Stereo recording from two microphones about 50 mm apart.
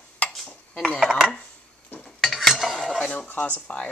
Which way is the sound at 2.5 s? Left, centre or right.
Centre.